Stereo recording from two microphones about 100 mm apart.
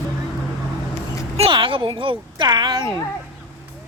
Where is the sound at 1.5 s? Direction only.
60° right (ahead or behind).